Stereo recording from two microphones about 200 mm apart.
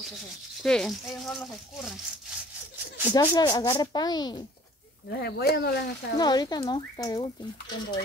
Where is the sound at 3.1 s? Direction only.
20° left (ahead or behind).